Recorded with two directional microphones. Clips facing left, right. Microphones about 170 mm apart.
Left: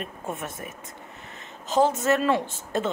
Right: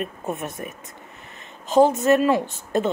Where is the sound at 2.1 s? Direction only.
10° right (ahead or behind).